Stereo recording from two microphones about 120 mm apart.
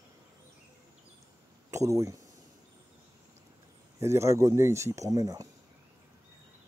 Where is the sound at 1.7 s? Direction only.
25° right (ahead or behind).